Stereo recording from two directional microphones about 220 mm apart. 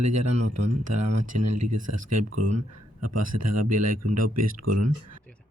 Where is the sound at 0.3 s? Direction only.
90° right.